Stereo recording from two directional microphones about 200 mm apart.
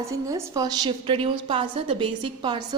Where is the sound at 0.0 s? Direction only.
15° right (ahead or behind).